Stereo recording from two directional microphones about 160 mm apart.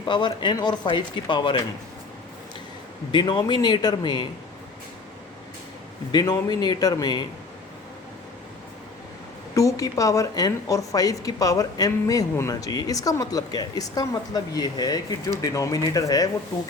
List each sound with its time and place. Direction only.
0.0 s a woman's voice: 30° left (ahead or behind)
3.1 s a woman's voice: 30° left (ahead or behind)
6.1 s a woman's voice: 25° left (ahead or behind)
9.6 s a woman's voice: 20° left (ahead or behind)